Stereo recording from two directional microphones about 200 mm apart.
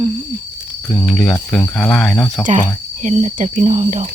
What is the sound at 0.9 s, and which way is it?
Speech, centre (ahead or behind).